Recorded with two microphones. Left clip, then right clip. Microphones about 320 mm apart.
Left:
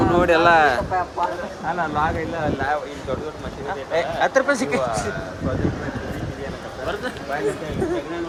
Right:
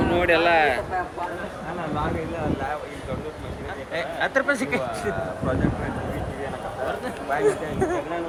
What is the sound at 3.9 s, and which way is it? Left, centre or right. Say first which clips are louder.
Speech: left 5 dB; left.